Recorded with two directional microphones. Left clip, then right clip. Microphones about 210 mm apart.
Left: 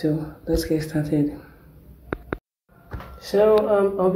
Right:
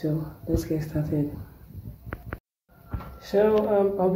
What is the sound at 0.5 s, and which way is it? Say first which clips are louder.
Speech: left 5 dB; 15° left (ahead or behind).